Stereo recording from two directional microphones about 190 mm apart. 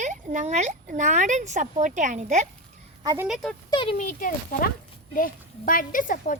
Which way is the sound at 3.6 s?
25° left (ahead or behind).